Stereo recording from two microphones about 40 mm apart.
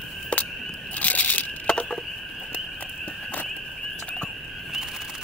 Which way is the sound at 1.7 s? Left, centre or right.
Left.